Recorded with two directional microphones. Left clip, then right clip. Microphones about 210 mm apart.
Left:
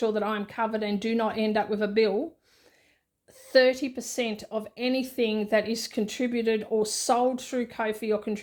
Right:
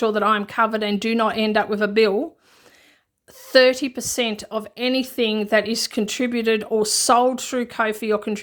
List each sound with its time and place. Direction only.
0.0 s a woman's voice: 25° right (ahead or behind)
3.4 s a woman's voice: 25° right (ahead or behind)